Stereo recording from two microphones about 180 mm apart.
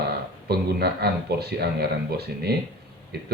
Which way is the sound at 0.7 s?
65° right (ahead or behind).